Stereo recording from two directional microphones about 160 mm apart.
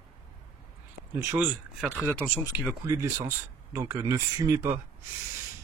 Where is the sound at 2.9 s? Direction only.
15° right (ahead or behind).